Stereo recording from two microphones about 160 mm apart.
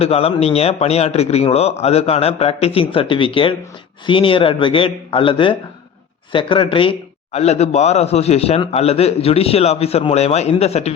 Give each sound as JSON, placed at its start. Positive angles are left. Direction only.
{"t": 0.0, "sound": "a man's voice", "side_deg": 40}